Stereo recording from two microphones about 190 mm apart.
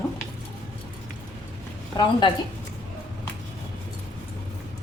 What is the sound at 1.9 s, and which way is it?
Speech, 25° left (ahead or behind).